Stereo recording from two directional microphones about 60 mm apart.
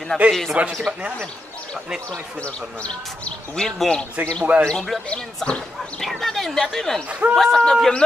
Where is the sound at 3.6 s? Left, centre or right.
Centre.